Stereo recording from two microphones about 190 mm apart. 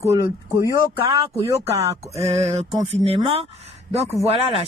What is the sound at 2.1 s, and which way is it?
A woman's voice, 35° right (ahead or behind).